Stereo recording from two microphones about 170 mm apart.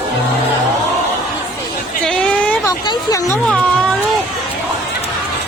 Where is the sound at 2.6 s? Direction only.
25° left (ahead or behind).